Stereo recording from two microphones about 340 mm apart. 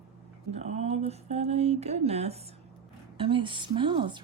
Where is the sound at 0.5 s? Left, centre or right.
Centre.